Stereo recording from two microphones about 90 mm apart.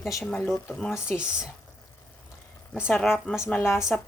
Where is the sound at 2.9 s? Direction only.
5° left (ahead or behind).